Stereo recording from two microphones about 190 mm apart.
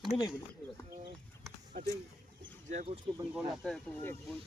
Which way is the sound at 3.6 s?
5° left (ahead or behind).